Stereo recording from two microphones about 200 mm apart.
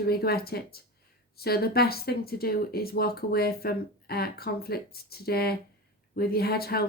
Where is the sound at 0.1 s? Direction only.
50° left (ahead or behind).